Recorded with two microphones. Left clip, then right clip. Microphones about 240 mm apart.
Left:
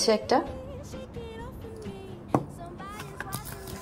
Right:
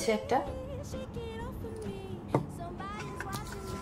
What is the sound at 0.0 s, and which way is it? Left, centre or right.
Speech, right.